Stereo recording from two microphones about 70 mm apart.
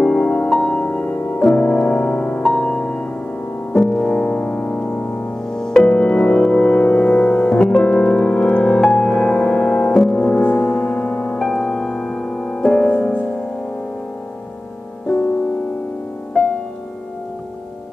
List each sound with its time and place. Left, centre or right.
0.0 s music: centre
5.5 s music: centre
7.8 s piano: left
8.8 s music: centre
11.3 s music: centre